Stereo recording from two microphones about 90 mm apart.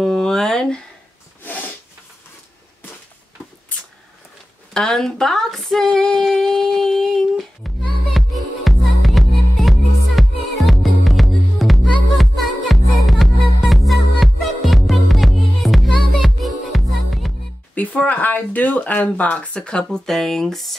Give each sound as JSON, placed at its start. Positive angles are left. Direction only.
{"t": 0.0, "sound": "a sound", "side_deg": 5}
{"t": 1.4, "sound": "snort", "side_deg": 20}
{"t": 3.7, "sound": "a sound", "side_deg": 15}
{"t": 4.7, "sound": "female singing", "side_deg": 5}
{"t": 12.2, "sound": "music", "side_deg": 0}
{"t": 17.7, "sound": "speech", "side_deg": 15}